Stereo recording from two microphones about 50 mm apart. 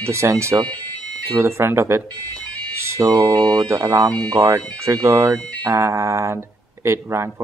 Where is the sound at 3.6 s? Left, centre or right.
Right.